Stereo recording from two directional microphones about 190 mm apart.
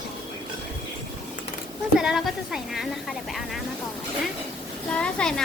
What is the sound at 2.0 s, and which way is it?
A woman's voice, 5° right (ahead or behind).